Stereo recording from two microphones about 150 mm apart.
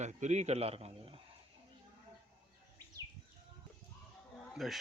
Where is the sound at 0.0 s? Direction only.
50° right (ahead or behind).